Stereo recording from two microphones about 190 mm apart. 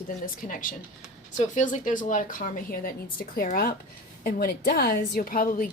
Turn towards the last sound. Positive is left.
turn(degrees=45)  # may be behind; listen again after turning